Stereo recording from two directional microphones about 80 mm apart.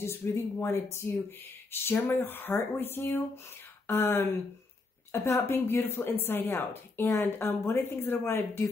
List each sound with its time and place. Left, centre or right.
0.0 s a woman's voice: left